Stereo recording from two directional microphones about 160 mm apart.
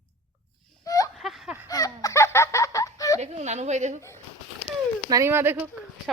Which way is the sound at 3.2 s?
45° right (ahead or behind).